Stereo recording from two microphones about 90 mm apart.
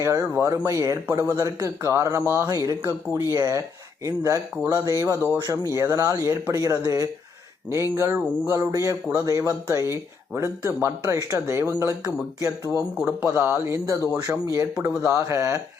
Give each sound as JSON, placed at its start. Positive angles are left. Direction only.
{"t": 0.0, "sound": "speech", "side_deg": -35}
{"t": 2.5, "sound": "speech", "side_deg": -40}